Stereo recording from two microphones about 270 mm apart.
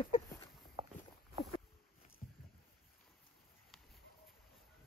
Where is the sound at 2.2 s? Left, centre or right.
Left.